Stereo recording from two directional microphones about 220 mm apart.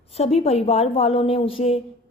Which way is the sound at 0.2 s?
25° left (ahead or behind).